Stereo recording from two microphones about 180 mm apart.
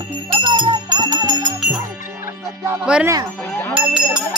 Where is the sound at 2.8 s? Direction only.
5° right (ahead or behind).